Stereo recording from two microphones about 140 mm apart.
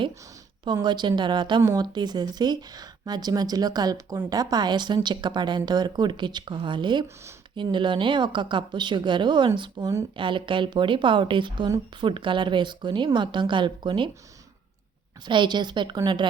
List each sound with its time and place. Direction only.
0.6 s a woman's voice: 30° right (ahead or behind)
15.2 s a woman's voice: 35° right (ahead or behind)